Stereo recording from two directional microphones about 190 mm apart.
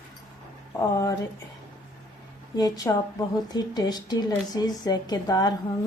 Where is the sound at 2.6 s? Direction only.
20° left (ahead or behind).